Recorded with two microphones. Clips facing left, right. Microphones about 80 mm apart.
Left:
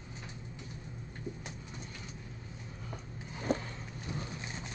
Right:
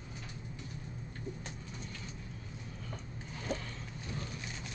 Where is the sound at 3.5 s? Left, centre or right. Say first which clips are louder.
Left 6 dB; left.